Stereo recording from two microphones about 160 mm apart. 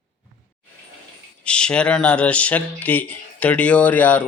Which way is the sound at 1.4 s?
5° left (ahead or behind).